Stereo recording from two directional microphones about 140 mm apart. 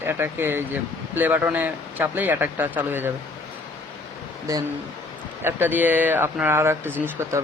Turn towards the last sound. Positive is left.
turn(degrees=-15)  # may be behind; listen again after turning